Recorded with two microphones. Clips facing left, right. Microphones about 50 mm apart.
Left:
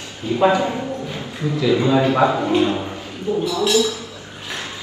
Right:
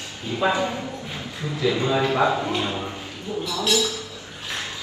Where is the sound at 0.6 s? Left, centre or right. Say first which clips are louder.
Left 4 dB; left.